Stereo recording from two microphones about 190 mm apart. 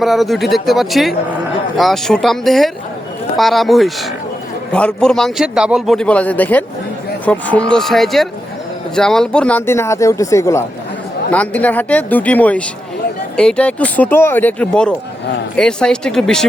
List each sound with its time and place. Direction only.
0.0 s a man's voice: centre (ahead or behind)